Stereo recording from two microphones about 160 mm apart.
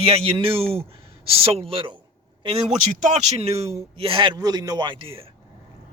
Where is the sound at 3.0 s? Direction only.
40° right (ahead or behind).